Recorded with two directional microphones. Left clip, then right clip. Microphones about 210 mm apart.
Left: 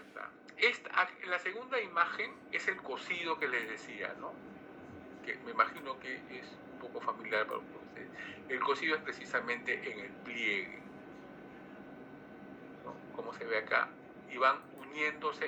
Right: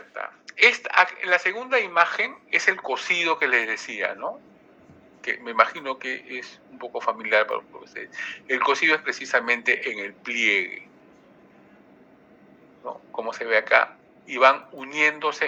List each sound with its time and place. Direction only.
0.1 s speech: 45° right (ahead or behind)
13.1 s speech: 45° right (ahead or behind)